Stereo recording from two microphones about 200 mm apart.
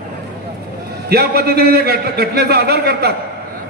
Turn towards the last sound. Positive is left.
turn(degrees=-55)  # may be behind; listen again after turning